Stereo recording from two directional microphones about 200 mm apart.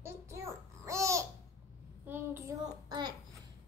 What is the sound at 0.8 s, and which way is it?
Babbling, 15° right (ahead or behind).